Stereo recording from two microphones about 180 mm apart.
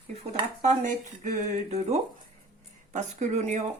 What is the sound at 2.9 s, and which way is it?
Speech, 40° right (ahead or behind).